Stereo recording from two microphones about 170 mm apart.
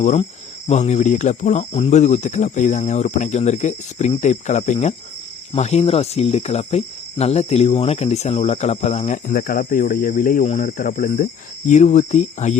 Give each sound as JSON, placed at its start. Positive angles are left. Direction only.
{"t": 0.0, "sound": "speech", "side_deg": 45}
{"t": 5.5, "sound": "cricket", "side_deg": 40}
{"t": 10.5, "sound": "speech", "side_deg": 50}